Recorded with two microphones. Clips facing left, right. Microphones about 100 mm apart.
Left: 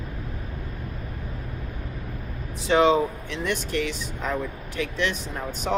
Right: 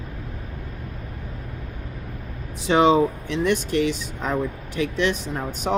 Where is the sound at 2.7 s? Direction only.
20° right (ahead or behind).